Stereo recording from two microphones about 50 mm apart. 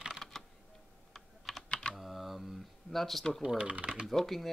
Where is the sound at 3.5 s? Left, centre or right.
Right.